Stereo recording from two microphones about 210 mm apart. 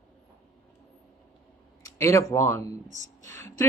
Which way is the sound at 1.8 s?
15° left (ahead or behind).